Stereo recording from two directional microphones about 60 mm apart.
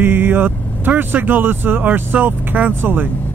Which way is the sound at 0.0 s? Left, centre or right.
Right.